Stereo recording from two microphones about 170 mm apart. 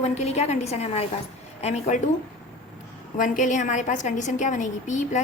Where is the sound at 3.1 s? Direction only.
50° left (ahead or behind).